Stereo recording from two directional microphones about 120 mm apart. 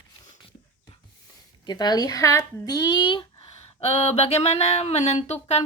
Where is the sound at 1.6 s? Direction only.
35° left (ahead or behind).